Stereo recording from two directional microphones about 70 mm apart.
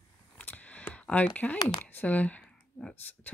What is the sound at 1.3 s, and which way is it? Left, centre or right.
Speech, left.